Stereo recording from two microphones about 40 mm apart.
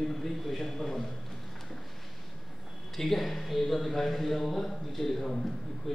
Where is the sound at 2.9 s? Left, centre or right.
Centre.